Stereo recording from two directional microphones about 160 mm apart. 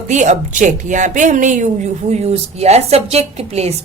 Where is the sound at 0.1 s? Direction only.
50° right (ahead or behind).